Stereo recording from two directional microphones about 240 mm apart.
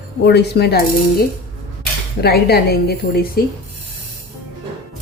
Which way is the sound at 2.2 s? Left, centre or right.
Left.